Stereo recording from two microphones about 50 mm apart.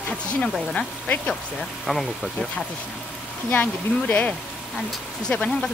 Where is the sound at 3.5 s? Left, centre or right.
Left.